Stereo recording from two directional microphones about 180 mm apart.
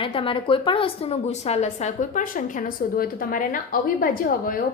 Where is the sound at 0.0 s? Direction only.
30° left (ahead or behind).